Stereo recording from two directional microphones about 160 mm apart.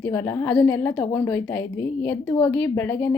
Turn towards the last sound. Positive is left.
turn(degrees=10)  # may be behind; listen again after turning